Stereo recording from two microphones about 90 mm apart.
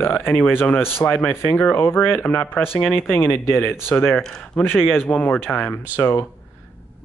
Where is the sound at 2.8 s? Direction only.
Centre (ahead or behind).